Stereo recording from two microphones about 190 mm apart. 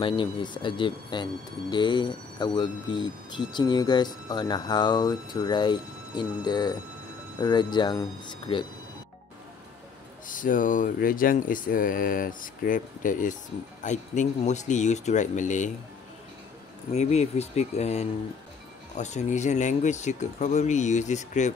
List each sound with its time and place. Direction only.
0.0 s speech: 25° left (ahead or behind)
10.2 s speech: 45° left (ahead or behind)
16.9 s speech: 35° left (ahead or behind)